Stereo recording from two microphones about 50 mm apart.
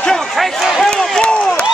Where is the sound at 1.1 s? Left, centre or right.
Centre.